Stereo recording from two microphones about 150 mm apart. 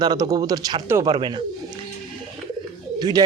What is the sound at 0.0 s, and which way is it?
Speech, 25° right (ahead or behind).